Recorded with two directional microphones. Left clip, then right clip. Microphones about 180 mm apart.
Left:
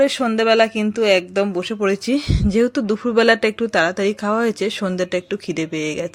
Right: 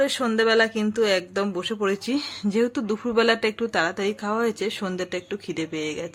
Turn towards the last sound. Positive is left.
turn(degrees=25)  # may be behind; listen again after turning